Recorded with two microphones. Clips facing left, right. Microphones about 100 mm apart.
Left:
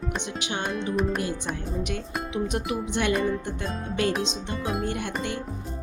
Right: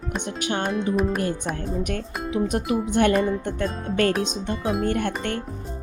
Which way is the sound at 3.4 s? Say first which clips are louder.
Right 6 dB; 55° right (ahead or behind).